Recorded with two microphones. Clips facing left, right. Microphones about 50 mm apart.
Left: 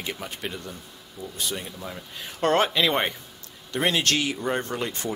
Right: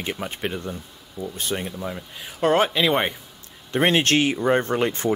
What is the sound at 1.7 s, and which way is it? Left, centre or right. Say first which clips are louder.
Speech: right 6 dB; centre.